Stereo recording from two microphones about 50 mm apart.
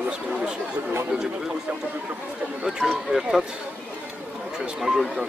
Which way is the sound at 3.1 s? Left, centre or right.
Centre.